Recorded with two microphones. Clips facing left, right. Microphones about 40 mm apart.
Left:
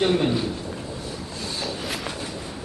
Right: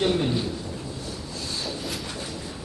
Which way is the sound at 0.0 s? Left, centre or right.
Left.